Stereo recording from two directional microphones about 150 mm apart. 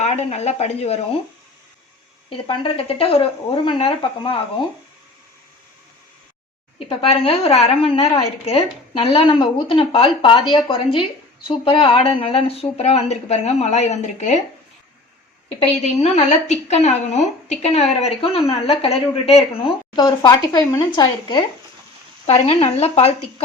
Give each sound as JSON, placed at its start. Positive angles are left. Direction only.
{"t": 0.0, "sound": "speech", "side_deg": 50}
{"t": 2.3, "sound": "a woman's voice", "side_deg": 35}
{"t": 6.7, "sound": "a woman's voice", "side_deg": 40}
{"t": 11.4, "sound": "speech", "side_deg": 35}
{"t": 15.7, "sound": "a woman's voice", "side_deg": 45}
{"t": 22.3, "sound": "speech", "side_deg": 45}